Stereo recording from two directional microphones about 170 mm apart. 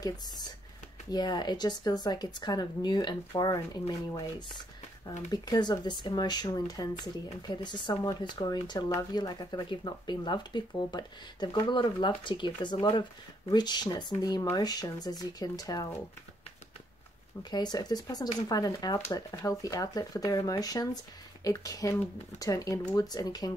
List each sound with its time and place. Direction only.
1.1 s speech: 25° left (ahead or behind)
5.3 s speech: 25° left (ahead or behind)
17.4 s speech: 25° left (ahead or behind)